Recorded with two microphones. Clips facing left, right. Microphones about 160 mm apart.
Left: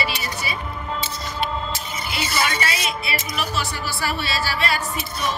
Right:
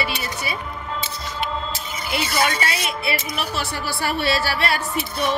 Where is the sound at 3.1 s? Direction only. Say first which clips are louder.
Right 2 dB; 60° right (ahead or behind).